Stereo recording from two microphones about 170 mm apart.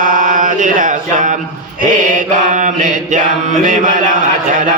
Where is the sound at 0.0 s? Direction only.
50° right (ahead or behind).